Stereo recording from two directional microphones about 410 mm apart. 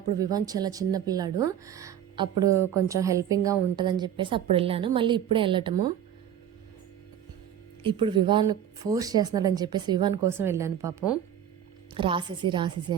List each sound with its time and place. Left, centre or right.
0.2 s a woman's voice: centre
2.3 s speech: right
2.7 s a woman's voice: centre
7.8 s a woman's voice: centre